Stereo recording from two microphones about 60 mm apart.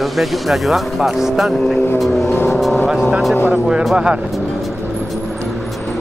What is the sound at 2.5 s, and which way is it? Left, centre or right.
Vehicle, centre.